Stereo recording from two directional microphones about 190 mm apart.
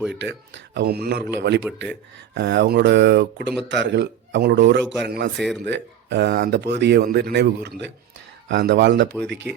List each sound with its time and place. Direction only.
0.1 s speech: 65° right (ahead or behind)